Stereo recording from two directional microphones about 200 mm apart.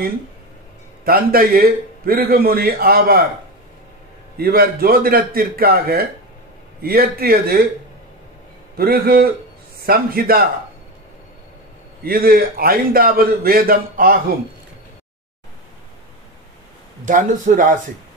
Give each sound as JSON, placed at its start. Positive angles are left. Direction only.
{"t": 1.0, "sound": "a man's voice", "side_deg": -50}
{"t": 4.4, "sound": "a man's voice", "side_deg": -50}
{"t": 8.7, "sound": "a man's voice", "side_deg": -50}
{"t": 12.0, "sound": "a man's voice", "side_deg": -50}
{"t": 17.0, "sound": "speech", "side_deg": -40}